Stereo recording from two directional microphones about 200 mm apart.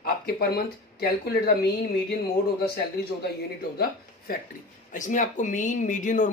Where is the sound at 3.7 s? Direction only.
50° left (ahead or behind).